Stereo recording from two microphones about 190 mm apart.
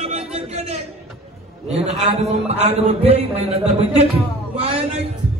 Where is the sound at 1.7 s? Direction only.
35° right (ahead or behind).